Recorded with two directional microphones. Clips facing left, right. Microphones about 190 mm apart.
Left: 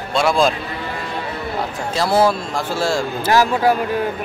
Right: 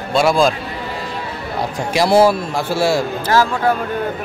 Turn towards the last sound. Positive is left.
turn(degrees=15)  # may be behind; listen again after turning